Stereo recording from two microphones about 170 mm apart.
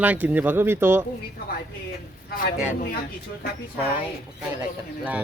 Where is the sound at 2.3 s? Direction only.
60° left (ahead or behind).